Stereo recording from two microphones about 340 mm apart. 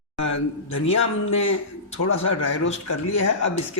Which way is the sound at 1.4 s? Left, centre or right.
Left.